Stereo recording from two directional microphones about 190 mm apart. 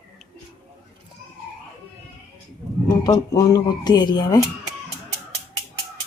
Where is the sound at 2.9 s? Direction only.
20° left (ahead or behind).